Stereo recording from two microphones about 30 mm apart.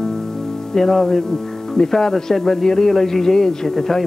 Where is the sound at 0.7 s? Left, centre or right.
Centre.